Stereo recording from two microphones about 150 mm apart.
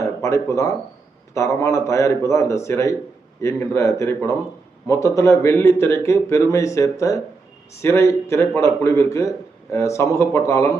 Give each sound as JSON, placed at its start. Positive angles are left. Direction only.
{"t": 0.0, "sound": "a man's voice", "side_deg": 20}